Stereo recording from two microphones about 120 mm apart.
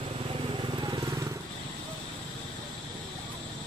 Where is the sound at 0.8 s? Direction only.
35° right (ahead or behind).